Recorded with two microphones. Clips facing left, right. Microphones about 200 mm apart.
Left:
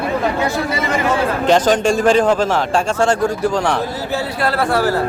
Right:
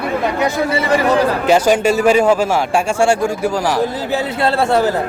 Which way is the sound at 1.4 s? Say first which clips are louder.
Left 2 dB; 5° right (ahead or behind).